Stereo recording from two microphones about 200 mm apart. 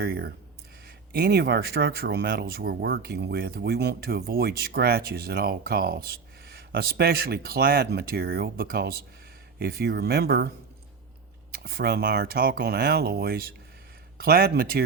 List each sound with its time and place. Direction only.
0.0 s speech: 50° right (ahead or behind)
11.5 s speech: 50° right (ahead or behind)